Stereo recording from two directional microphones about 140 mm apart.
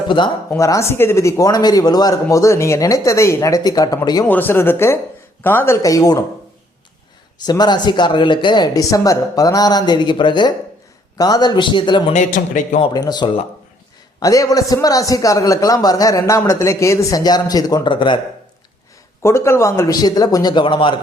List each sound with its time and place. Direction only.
0.5 s a man's voice: 20° left (ahead or behind)
4.3 s a man's voice: 15° left (ahead or behind)
7.4 s a woman's voice: 30° left (ahead or behind)
12.1 s a man's voice: 60° left (ahead or behind)
12.9 s a man's voice: 30° left (ahead or behind)
19.2 s a man's voice: 20° left (ahead or behind); by 21.0 s 35° left (ahead or behind)